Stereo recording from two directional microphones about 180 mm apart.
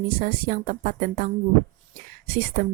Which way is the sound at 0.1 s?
50° right (ahead or behind).